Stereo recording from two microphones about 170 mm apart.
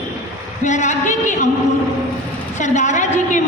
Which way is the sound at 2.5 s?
45° left (ahead or behind).